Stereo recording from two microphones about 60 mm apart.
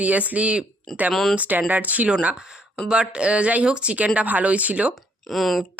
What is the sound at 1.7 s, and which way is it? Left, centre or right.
Speech, right.